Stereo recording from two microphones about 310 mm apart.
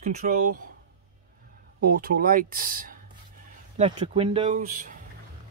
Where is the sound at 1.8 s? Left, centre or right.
Right.